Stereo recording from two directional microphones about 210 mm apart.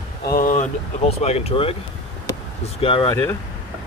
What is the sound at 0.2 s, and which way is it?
Speech, 45° left (ahead or behind).